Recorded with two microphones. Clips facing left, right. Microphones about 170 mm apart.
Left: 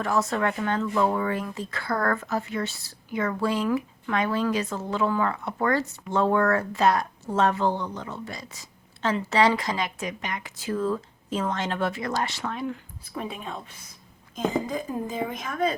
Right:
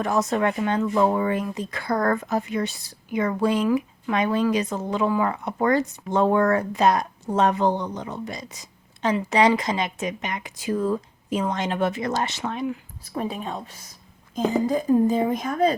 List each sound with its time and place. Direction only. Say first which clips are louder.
0.0 s speech: right 3 dB; 20° right (ahead or behind)
13.1 s a woman's voice: right 5 dB; 35° right (ahead or behind)